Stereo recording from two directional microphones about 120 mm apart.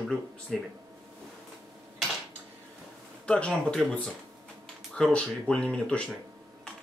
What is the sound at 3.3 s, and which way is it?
Speech, 10° left (ahead or behind).